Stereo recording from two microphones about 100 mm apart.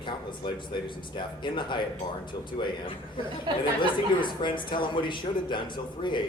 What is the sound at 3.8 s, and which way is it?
Speech, 55° left (ahead or behind).